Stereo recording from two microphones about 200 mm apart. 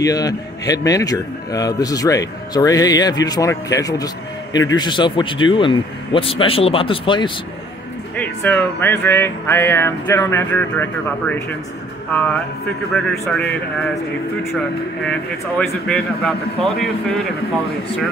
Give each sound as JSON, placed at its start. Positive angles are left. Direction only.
{"t": 0.0, "sound": "a man's voice", "side_deg": 15}
{"t": 8.2, "sound": "speech", "side_deg": 5}
{"t": 15.0, "sound": "speech", "side_deg": 5}